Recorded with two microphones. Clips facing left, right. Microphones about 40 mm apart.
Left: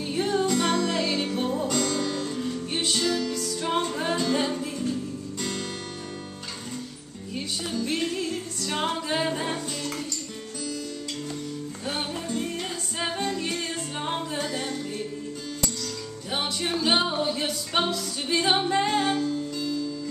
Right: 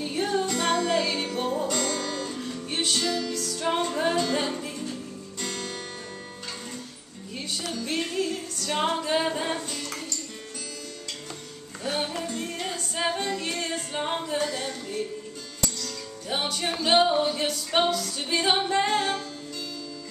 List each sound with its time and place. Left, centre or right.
0.0 s music: centre
1.4 s music: centre
3.3 s music: centre
3.6 s music: centre
7.7 s music: centre
11.9 s music: centre
13.9 s a capella: centre
14.4 s music: centre
18.3 s music: centre